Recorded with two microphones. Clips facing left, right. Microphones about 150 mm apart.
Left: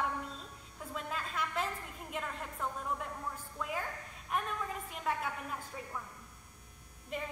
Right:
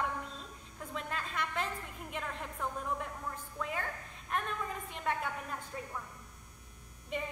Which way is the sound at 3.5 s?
5° left (ahead or behind).